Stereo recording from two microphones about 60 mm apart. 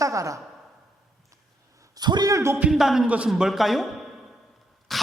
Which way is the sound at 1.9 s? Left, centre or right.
Right.